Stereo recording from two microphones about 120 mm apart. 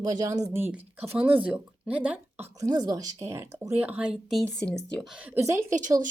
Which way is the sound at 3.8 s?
10° right (ahead or behind).